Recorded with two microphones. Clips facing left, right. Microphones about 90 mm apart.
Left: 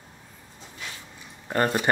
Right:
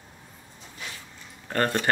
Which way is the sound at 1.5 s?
15° left (ahead or behind).